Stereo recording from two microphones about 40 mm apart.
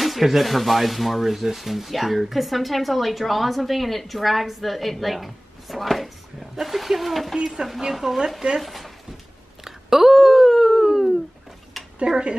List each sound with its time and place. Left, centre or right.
0.0 s speech: centre
9.7 s a sound: centre
12.1 s speech: centre